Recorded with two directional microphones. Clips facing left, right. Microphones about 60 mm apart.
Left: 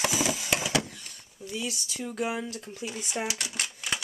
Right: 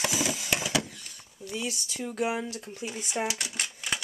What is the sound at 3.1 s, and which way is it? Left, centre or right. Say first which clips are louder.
Typewriter: right 2 dB; centre.